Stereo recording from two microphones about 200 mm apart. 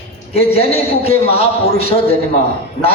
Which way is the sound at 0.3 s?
30° left (ahead or behind).